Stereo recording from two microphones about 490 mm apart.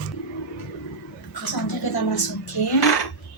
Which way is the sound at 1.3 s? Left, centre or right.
Left.